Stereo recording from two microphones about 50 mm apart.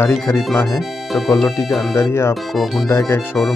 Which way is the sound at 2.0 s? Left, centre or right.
Left.